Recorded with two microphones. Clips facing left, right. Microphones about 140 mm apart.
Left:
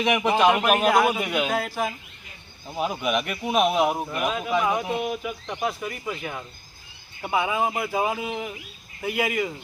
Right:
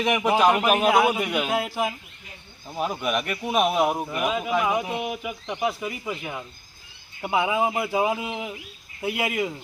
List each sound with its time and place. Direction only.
0.3 s a man's voice: 5° right (ahead or behind)